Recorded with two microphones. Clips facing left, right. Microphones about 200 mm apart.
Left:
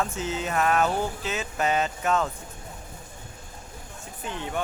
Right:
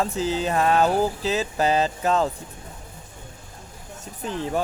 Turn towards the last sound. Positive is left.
turn(degrees=-35)  # may be behind; listen again after turning